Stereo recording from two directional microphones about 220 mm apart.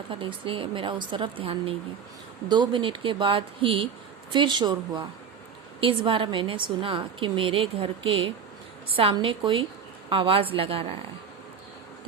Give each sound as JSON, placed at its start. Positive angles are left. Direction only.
{"t": 0.1, "sound": "a woman's voice", "side_deg": -25}